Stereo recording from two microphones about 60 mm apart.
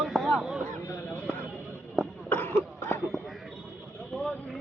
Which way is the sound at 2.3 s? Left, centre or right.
Left.